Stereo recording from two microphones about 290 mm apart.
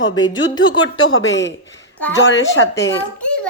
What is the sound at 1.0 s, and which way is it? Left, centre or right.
Speech, left.